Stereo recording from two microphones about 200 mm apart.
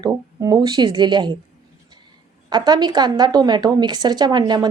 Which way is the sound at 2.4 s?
20° right (ahead or behind).